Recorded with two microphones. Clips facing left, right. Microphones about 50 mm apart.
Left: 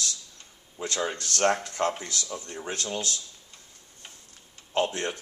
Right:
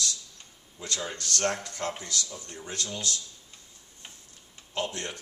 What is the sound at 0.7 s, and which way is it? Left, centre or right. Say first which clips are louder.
Speech: left 5 dB; left.